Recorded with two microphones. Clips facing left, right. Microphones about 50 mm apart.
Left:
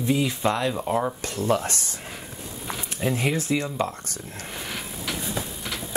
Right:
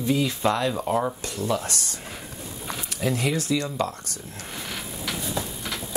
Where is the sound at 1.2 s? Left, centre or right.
Left.